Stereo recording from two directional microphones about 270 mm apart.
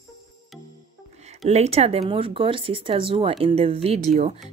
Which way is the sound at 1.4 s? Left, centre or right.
Right.